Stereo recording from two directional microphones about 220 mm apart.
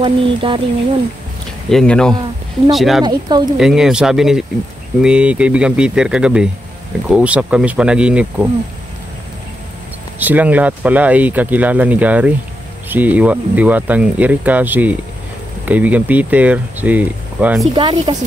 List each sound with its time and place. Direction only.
0.0 s speech: 25° right (ahead or behind)
1.7 s speech: 5° left (ahead or behind)
3.0 s speech: 20° right (ahead or behind)
3.5 s speech: centre (ahead or behind)
10.1 s speech: 5° right (ahead or behind)
17.7 s speech: 20° right (ahead or behind)